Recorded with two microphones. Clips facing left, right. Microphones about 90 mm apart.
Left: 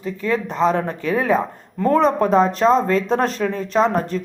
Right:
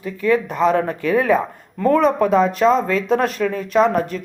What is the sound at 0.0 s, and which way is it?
Speech, 25° left (ahead or behind).